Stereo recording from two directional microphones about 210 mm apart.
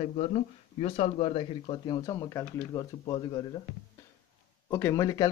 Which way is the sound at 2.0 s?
15° left (ahead or behind).